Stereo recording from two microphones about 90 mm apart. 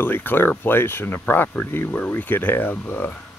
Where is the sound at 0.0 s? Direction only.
20° left (ahead or behind).